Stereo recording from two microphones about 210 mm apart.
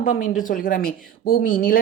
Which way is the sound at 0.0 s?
40° left (ahead or behind).